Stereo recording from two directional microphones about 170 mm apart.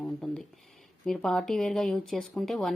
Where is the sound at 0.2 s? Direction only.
Centre (ahead or behind).